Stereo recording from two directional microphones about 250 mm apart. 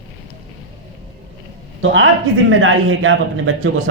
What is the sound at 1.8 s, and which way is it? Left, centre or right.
A man's voice, right.